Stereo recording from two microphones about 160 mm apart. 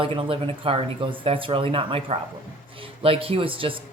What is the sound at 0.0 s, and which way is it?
Speech, 35° right (ahead or behind).